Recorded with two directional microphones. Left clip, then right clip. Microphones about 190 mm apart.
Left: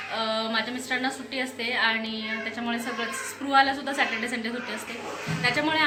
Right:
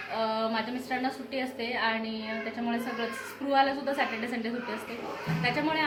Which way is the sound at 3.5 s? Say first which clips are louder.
Left 4 dB; 15° right (ahead or behind).